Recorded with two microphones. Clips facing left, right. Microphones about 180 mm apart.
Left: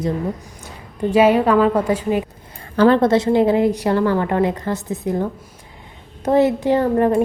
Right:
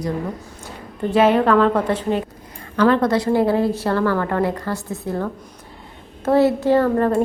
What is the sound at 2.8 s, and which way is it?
A woman's voice, 30° left (ahead or behind).